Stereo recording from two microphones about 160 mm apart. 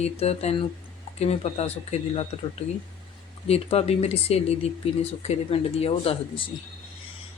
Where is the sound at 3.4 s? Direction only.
40° left (ahead or behind).